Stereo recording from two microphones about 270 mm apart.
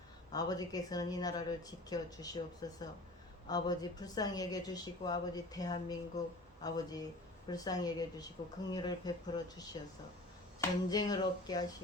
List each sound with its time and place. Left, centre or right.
0.3 s a woman's voice: centre